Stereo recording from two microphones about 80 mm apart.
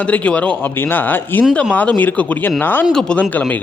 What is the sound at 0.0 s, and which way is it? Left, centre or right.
A man's voice, centre.